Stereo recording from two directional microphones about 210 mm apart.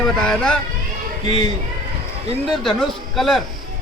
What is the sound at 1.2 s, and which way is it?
Speech, 30° right (ahead or behind).